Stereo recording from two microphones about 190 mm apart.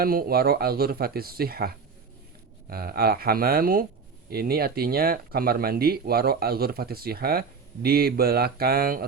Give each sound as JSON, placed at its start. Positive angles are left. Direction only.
{"t": 0.0, "sound": "speech", "side_deg": -50}